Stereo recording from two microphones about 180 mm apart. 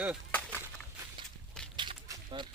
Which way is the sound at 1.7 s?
25° right (ahead or behind).